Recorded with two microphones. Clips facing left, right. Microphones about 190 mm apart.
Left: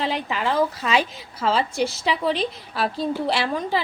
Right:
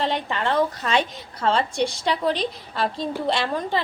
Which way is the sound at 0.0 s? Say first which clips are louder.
Even; 5° left (ahead or behind).